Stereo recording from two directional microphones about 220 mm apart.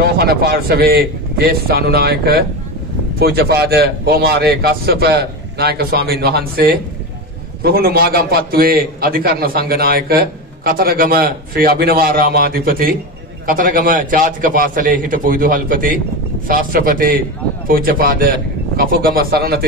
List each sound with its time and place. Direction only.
0.0 s a man's voice: 45° right (ahead or behind)